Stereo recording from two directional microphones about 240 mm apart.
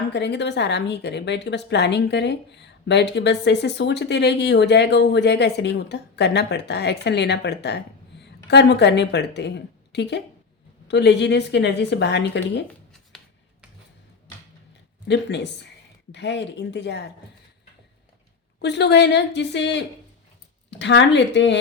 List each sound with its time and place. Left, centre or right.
0.1 s a woman's voice: left
15.0 s a woman's voice: left
18.6 s a woman's voice: left